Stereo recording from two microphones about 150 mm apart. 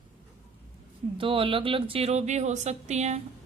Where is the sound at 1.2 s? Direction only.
35° right (ahead or behind).